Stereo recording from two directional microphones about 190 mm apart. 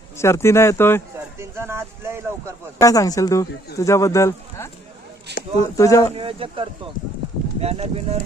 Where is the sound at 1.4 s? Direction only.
15° right (ahead or behind).